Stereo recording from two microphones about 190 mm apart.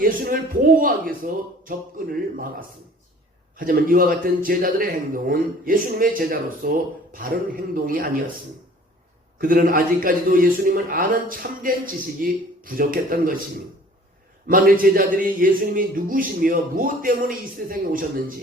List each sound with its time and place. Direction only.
0.0 s speech: 50° right (ahead or behind)
9.4 s speech: 50° right (ahead or behind)
14.4 s speech: 45° right (ahead or behind)